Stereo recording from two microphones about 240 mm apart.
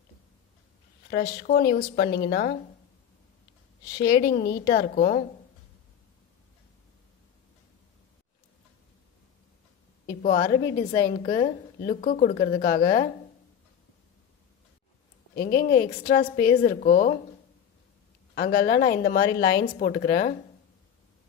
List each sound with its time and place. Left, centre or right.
1.4 s speech: left
4.0 s a woman's voice: left
10.0 s a sound: left
10.5 s a woman's voice: centre
11.1 s a woman's voice: left
15.3 s a woman's voice: left
16.2 s a woman's voice: centre
16.6 s a woman's voice: left
18.3 s a woman's voice: left